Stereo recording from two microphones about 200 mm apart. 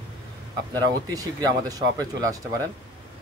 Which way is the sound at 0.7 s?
20° right (ahead or behind).